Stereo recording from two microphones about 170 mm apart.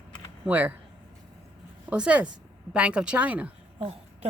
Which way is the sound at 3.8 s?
35° right (ahead or behind).